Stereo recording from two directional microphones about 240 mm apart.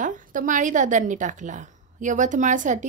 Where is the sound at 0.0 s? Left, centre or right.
Right.